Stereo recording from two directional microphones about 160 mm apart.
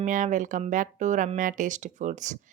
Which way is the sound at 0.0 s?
50° right (ahead or behind).